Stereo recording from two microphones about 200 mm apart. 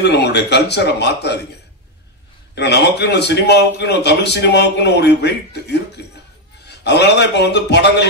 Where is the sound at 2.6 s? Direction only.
55° left (ahead or behind).